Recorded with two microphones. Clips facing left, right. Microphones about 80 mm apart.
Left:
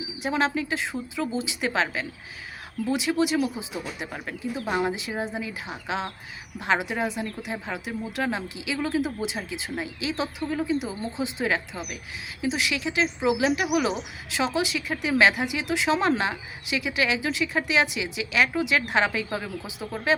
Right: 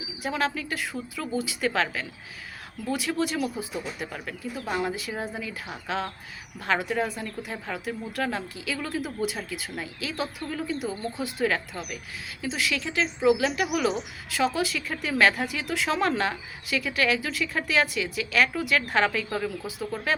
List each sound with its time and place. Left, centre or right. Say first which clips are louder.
0.2 s a woman's voice: left 3 dB; left